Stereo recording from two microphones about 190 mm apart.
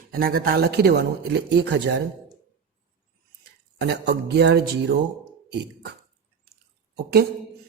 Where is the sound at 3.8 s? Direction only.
60° right (ahead or behind).